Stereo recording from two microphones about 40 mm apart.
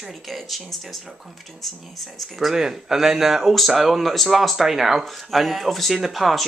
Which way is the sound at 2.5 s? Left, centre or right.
Centre.